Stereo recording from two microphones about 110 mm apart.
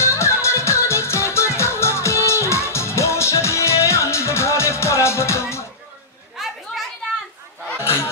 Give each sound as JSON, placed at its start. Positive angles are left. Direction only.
{"t": 0.0, "sound": "music", "side_deg": 25}
{"t": 6.3, "sound": "chatter", "side_deg": 0}
{"t": 7.8, "sound": "a sound", "side_deg": 20}